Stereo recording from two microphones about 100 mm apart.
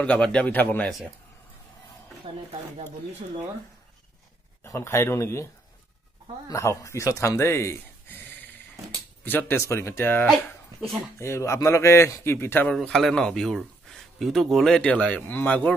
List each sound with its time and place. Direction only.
0.0 s speech: 10° left (ahead or behind)
0.8 s speech: 5° left (ahead or behind)
2.3 s speech: 70° right (ahead or behind)
4.6 s a man's voice: 25° left (ahead or behind)
12.7 s speech: centre (ahead or behind)